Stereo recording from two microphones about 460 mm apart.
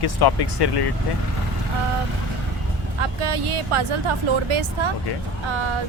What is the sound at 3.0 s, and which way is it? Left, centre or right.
Speech, right.